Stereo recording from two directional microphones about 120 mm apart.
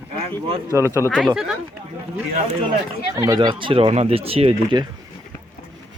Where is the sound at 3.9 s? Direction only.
60° right (ahead or behind).